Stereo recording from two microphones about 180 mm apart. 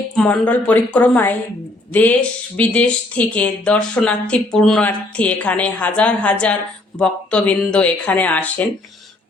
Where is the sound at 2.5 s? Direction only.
5° left (ahead or behind).